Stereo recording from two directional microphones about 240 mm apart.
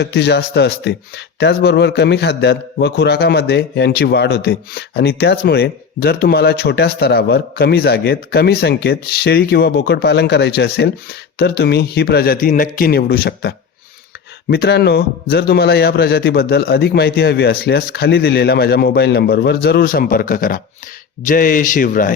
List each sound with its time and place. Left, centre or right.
0.0 s speech: left
14.5 s a man's voice: left